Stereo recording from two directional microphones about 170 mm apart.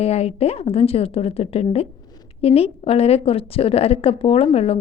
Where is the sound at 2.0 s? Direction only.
25° left (ahead or behind).